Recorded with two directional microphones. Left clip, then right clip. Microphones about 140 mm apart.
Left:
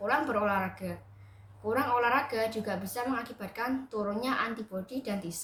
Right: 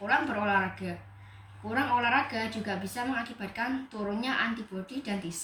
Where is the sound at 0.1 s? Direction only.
35° left (ahead or behind).